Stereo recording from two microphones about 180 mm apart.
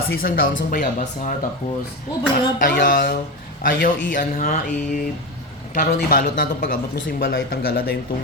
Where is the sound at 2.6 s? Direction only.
60° left (ahead or behind).